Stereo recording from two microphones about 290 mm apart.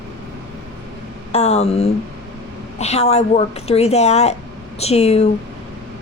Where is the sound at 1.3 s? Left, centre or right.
Left.